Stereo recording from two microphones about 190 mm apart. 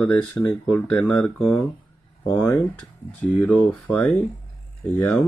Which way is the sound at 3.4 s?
10° left (ahead or behind).